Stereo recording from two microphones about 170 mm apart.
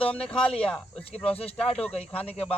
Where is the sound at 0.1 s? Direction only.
5° left (ahead or behind).